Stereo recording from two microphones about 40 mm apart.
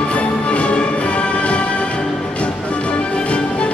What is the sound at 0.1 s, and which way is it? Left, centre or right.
Music, left.